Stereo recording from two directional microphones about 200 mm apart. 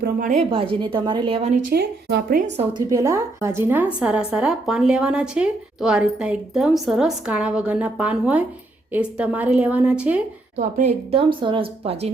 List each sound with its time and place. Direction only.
0.0 s a woman's voice: 40° right (ahead or behind)
0.5 s speech: 25° right (ahead or behind)
1.7 s a woman's voice: 55° right (ahead or behind)
2.6 s a woman's voice: 20° right (ahead or behind)
10.6 s speech: 35° right (ahead or behind)